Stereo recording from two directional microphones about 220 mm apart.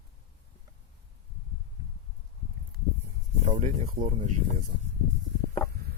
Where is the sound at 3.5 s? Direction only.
35° right (ahead or behind).